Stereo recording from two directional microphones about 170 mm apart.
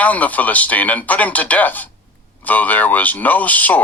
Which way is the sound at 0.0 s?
10° left (ahead or behind).